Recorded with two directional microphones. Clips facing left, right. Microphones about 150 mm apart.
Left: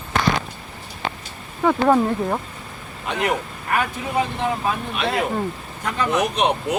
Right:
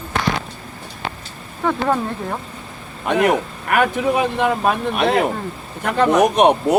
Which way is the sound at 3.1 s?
55° right (ahead or behind).